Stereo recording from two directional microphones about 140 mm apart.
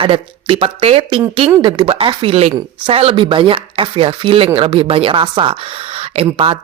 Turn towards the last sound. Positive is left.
turn(degrees=-45)  # may be behind; listen again after turning